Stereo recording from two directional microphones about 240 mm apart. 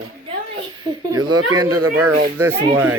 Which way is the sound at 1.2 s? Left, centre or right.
Right.